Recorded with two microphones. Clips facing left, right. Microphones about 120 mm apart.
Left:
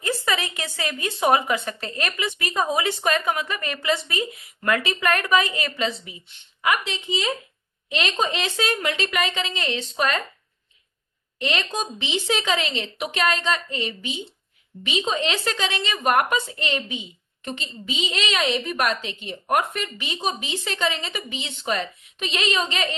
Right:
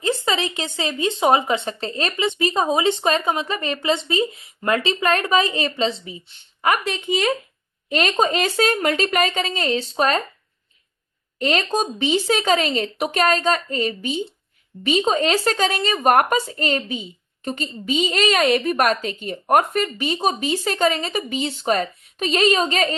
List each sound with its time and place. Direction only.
0.0 s speech: 25° right (ahead or behind)
6.6 s a woman's voice: 45° right (ahead or behind)
11.3 s a woman's voice: 40° right (ahead or behind)